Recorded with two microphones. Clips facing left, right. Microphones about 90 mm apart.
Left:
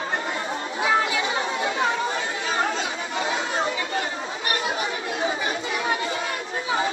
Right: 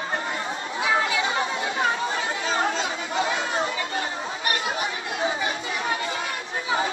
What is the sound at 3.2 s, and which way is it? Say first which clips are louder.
Chatter: left 2 dB; 35° left (ahead or behind).